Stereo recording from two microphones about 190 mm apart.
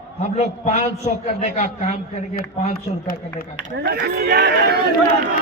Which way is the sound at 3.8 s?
55° right (ahead or behind).